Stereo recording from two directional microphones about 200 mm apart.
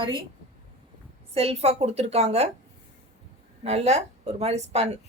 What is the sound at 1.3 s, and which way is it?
A woman's voice, 30° right (ahead or behind).